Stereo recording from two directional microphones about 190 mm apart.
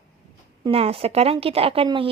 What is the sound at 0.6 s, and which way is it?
A woman's voice, 30° right (ahead or behind).